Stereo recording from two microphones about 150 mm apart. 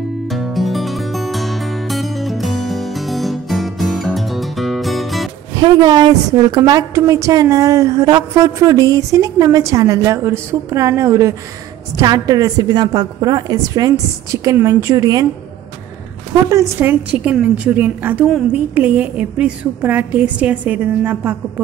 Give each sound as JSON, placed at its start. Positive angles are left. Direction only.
{"t": 0.3, "sound": "music", "side_deg": 0}
{"t": 5.6, "sound": "a woman's voice", "side_deg": -25}
{"t": 16.4, "sound": "a woman's voice", "side_deg": -20}
{"t": 17.1, "sound": "a woman's voice", "side_deg": -10}